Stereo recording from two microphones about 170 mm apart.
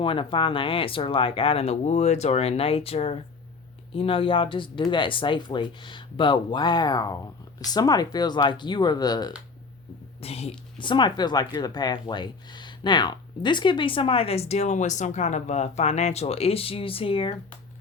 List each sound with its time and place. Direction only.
0.0 s speech: 30° left (ahead or behind)
10.2 s speech: 35° left (ahead or behind)